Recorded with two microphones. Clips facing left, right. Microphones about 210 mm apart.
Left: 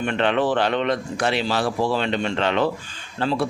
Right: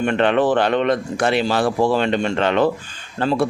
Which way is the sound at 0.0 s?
45° right (ahead or behind).